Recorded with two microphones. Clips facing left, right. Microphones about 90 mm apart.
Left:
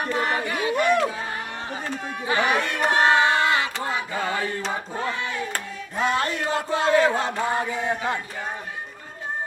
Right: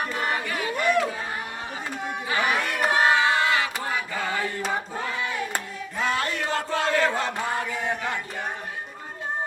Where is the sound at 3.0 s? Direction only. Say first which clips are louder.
Left 2 dB; 25° left (ahead or behind).